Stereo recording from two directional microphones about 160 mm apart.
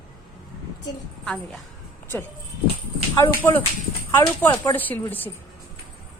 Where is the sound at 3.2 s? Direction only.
15° left (ahead or behind).